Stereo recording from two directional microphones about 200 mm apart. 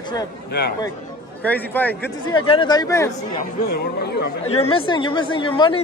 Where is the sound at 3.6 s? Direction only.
50° left (ahead or behind).